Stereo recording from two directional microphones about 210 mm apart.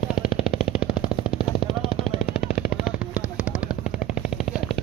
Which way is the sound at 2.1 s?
50° left (ahead or behind).